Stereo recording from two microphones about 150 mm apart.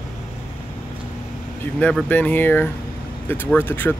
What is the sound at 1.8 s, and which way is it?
Speech, 10° left (ahead or behind).